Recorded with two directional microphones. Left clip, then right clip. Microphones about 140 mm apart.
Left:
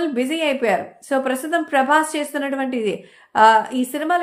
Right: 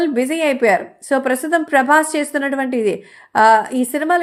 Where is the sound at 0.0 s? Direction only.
45° right (ahead or behind).